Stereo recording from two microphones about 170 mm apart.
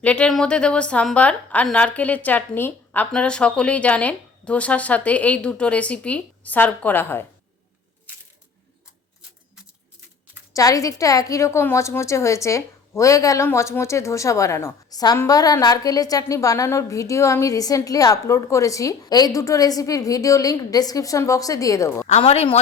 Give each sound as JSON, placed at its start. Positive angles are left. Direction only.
{"t": 0.0, "sound": "a woman's voice", "side_deg": 5}
{"t": 10.5, "sound": "a woman's voice", "side_deg": 20}
{"t": 22.0, "sound": "speech", "side_deg": 40}